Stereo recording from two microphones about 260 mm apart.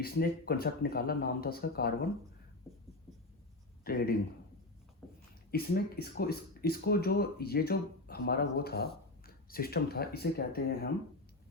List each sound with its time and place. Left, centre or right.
0.0 s speech: left
3.9 s speech: left
5.5 s speech: left